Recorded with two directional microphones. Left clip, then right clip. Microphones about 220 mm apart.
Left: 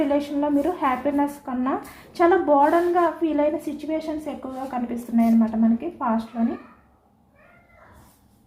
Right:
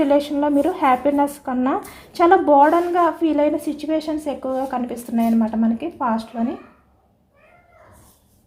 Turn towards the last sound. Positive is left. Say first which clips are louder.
# right 3 dB
turn(degrees=-35)  # may be behind; listen again after turning